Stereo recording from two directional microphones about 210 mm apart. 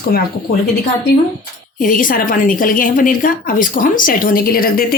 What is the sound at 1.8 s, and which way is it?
A woman's voice, 40° left (ahead or behind).